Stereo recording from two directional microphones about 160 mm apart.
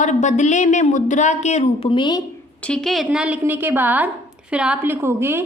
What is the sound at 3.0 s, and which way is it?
A woman's voice, 10° right (ahead or behind).